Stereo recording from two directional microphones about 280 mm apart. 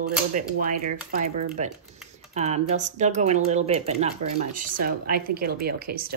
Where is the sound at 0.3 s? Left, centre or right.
Right.